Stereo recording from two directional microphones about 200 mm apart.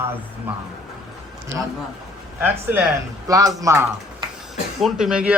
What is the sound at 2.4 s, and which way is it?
Speech, 10° right (ahead or behind).